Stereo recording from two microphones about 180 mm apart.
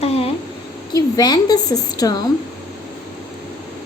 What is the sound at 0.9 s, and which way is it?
A woman's voice, 20° left (ahead or behind).